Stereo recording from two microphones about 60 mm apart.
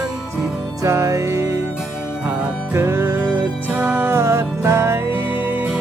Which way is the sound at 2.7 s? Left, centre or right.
Right.